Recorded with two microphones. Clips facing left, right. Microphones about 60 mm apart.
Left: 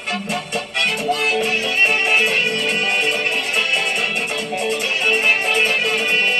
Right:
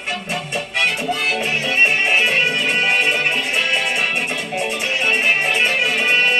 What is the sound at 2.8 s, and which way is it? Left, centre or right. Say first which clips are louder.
Music: right 2 dB; right.